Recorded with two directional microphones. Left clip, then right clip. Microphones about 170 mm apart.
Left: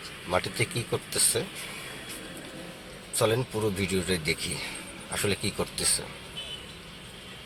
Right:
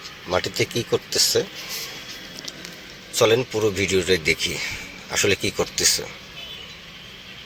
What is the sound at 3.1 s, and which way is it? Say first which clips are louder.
Speech: right 8 dB; 15° right (ahead or behind).